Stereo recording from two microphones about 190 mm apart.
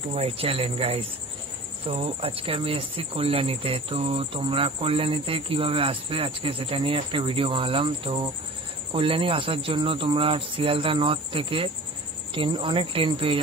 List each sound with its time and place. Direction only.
0.1 s speech: 30° right (ahead or behind)